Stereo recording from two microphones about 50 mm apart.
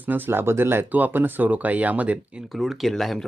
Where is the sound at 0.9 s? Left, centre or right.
Right.